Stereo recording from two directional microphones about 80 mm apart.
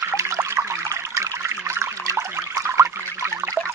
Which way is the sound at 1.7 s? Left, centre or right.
Right.